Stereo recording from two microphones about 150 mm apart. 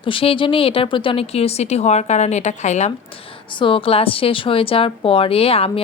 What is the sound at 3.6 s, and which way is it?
A woman's voice, 35° left (ahead or behind).